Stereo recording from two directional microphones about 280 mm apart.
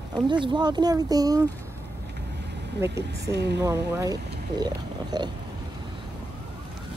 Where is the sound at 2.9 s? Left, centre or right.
Right.